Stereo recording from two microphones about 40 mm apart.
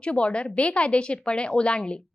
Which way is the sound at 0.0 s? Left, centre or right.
Left.